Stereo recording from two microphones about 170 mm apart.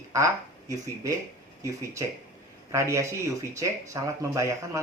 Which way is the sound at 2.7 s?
15° right (ahead or behind).